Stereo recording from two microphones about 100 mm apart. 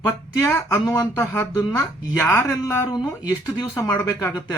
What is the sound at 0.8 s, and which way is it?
Speech, 35° left (ahead or behind).